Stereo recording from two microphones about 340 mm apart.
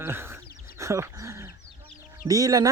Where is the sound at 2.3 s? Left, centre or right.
Centre.